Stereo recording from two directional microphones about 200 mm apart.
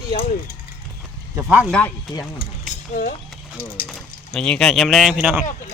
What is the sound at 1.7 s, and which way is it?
Speech, 5° left (ahead or behind).